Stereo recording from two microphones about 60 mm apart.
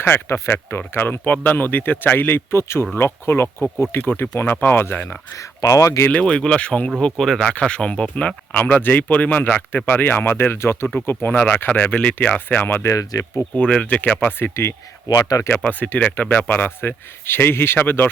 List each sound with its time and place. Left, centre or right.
0.0 s speech: left
5.4 s speech: left
6.1 s speech: centre
7.2 s speech: centre
7.6 s speech: centre; by 11.3 s left
11.3 s speech: left
12.8 s speech: left
13.6 s speech: centre
14.2 s speech: left
15.1 s speech: left
15.4 s speech: left